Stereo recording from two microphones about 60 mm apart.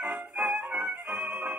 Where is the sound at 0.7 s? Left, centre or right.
Right.